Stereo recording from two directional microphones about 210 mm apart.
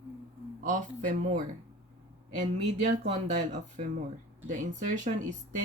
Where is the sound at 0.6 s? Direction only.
40° right (ahead or behind).